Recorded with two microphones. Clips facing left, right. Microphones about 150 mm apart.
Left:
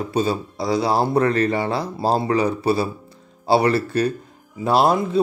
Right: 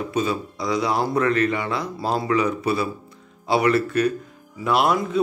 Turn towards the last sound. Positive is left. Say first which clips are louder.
# left 3 dB
turn(degrees=30)  # may be behind; listen again after turning